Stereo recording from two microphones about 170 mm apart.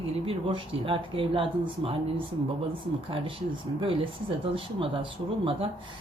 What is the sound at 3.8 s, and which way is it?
Speech, 30° right (ahead or behind).